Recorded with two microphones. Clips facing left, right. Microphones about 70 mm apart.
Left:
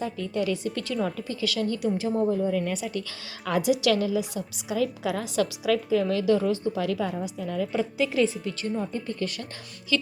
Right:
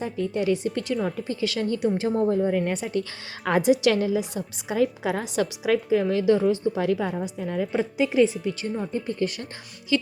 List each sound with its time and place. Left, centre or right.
0.0 s a woman's voice: right